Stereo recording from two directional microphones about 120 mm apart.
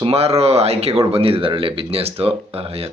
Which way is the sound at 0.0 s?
60° right (ahead or behind).